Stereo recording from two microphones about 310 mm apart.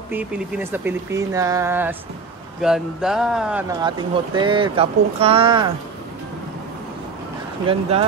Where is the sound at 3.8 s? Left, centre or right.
Centre.